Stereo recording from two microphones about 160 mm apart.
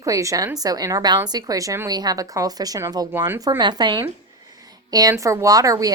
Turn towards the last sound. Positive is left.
turn(degrees=-20)  # may be behind; listen again after turning